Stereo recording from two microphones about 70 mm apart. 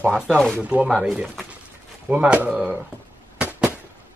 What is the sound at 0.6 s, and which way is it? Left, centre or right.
Speech, centre.